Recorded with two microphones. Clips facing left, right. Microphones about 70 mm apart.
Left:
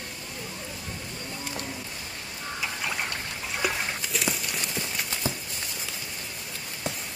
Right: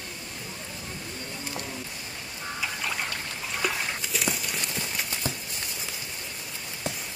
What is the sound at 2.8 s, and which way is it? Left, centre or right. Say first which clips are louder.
Trickle: left 1 dB; centre.